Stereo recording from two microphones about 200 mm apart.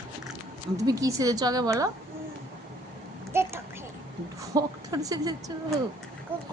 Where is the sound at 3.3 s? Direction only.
10° right (ahead or behind).